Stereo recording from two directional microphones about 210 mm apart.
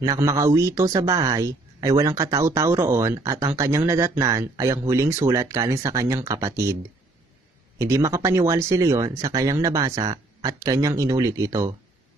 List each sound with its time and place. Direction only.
0.0 s speech: 15° right (ahead or behind)
7.8 s speech: 15° right (ahead or behind)